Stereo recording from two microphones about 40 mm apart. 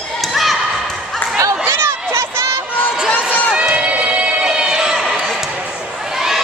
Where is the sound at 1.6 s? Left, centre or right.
Right.